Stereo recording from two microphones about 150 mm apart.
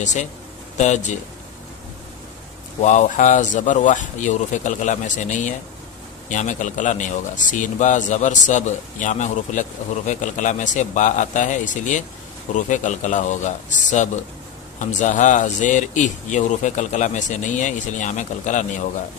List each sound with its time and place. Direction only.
0.0 s speech: 50° left (ahead or behind)
2.8 s speech: 50° left (ahead or behind)